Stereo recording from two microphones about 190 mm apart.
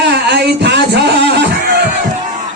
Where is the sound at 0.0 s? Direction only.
65° right (ahead or behind).